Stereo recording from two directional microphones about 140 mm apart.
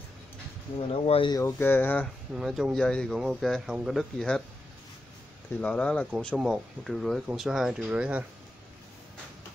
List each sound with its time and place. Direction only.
1.0 s speech: 45° left (ahead or behind)
1.3 s speech: 15° left (ahead or behind)
2.3 s speech: centre (ahead or behind)
5.6 s speech: 10° left (ahead or behind)
6.1 s speech: centre (ahead or behind)